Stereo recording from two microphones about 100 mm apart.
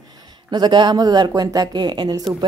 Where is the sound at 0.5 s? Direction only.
45° right (ahead or behind).